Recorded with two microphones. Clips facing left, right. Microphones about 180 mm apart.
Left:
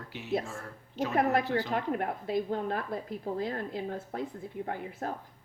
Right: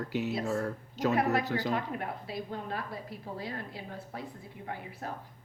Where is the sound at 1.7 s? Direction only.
50° left (ahead or behind).